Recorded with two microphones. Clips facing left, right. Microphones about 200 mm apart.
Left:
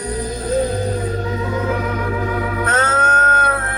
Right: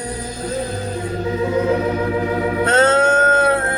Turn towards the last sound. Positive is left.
turn(degrees=-30)  # may be behind; listen again after turning